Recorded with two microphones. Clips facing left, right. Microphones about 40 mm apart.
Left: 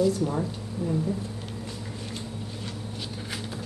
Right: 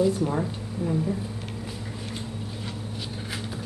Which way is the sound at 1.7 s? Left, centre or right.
Centre.